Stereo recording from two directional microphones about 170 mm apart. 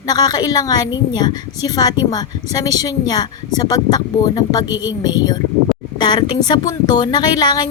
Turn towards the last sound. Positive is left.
turn(degrees=25)  # may be behind; listen again after turning